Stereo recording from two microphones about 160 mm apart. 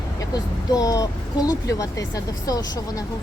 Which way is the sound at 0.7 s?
20° left (ahead or behind).